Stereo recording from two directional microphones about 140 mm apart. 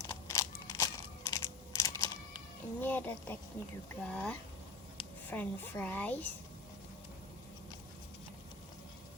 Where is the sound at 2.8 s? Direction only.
15° left (ahead or behind).